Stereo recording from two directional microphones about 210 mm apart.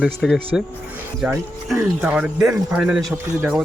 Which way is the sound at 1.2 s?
10° right (ahead or behind).